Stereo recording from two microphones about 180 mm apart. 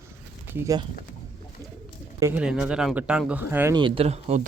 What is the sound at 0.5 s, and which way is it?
Speech, 15° right (ahead or behind).